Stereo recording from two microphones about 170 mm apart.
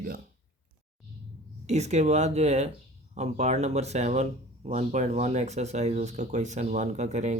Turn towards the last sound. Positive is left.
turn(degrees=-40)  # may be behind; listen again after turning